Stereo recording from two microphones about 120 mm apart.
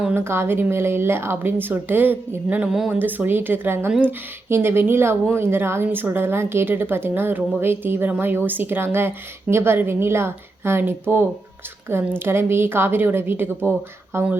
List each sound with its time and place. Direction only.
0.2 s a woman's voice: 20° right (ahead or behind)